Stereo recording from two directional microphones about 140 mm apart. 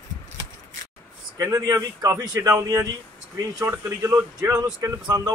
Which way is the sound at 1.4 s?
25° right (ahead or behind).